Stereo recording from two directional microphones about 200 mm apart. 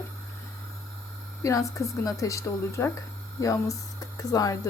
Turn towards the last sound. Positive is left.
turn(degrees=15)  # may be behind; listen again after turning